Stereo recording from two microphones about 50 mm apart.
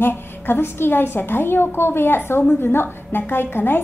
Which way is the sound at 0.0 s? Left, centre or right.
Left.